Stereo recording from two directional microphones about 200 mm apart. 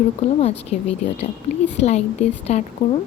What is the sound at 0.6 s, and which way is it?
A woman's voice, 30° left (ahead or behind).